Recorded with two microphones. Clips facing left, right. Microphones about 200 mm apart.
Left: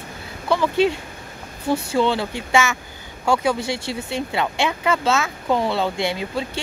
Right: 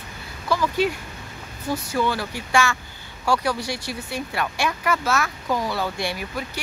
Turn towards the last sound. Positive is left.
turn(degrees=20)  # may be behind; listen again after turning